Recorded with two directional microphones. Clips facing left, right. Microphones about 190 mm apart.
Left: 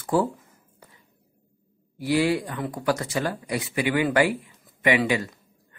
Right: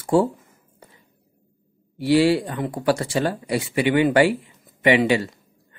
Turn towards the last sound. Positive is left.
turn(degrees=-30)  # may be behind; listen again after turning